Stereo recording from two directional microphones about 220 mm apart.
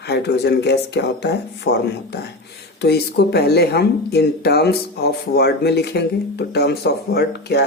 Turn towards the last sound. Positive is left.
turn(degrees=50)  # may be behind; listen again after turning